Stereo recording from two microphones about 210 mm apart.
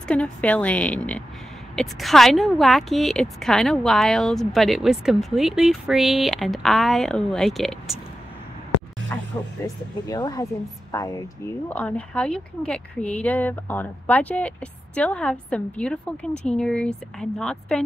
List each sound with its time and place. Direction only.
0.1 s speech: 5° left (ahead or behind)
9.1 s music: 10° left (ahead or behind)
10.0 s speech: 20° left (ahead or behind)